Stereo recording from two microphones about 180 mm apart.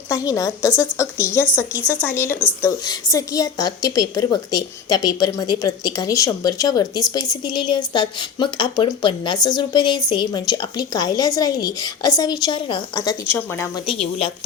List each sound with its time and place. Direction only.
0.1 s a woman's voice: 20° left (ahead or behind)